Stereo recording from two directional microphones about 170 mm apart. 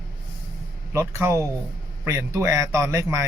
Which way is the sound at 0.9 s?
15° right (ahead or behind).